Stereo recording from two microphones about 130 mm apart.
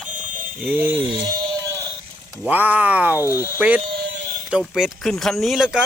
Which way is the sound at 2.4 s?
10° right (ahead or behind).